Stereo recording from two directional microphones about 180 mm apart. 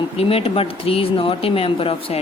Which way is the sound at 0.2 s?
30° left (ahead or behind).